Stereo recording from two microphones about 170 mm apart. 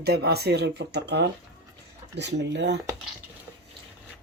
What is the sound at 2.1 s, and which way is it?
Speech, 90° right.